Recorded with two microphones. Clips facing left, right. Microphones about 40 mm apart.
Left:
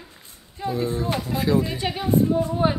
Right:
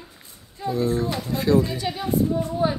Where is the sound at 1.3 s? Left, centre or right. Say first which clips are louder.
Right 2 dB; centre.